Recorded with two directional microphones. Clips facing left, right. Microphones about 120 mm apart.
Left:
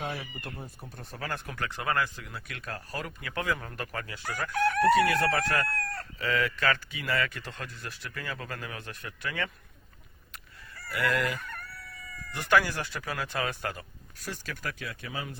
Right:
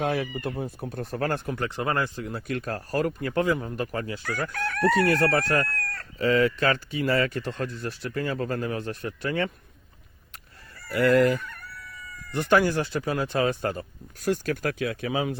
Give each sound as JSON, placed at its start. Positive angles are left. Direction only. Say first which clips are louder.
{"t": 0.0, "sound": "speech", "louder": "right 10 dB", "side_deg": -70}
{"t": 1.5, "sound": "speech", "louder": "right 5 dB", "side_deg": -25}
{"t": 3.4, "sound": "speech", "louder": "right 3 dB", "side_deg": -20}
{"t": 4.5, "sound": "chicken", "louder": "left 3 dB", "side_deg": 20}
{"t": 5.0, "sound": "speech", "louder": "right 4 dB", "side_deg": -35}
{"t": 10.8, "sound": "speech", "louder": "right 9 dB", "side_deg": -40}
{"t": 14.3, "sound": "speech", "louder": "right 12 dB", "side_deg": -60}